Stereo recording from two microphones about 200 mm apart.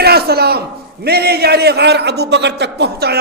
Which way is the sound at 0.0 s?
50° right (ahead or behind).